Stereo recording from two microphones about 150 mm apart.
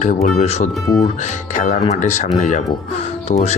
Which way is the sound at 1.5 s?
60° left (ahead or behind).